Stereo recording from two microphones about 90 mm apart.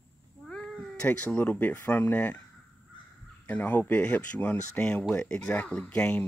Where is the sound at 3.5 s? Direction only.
20° left (ahead or behind).